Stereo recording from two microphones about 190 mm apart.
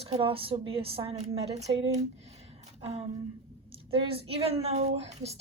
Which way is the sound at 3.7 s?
30° right (ahead or behind).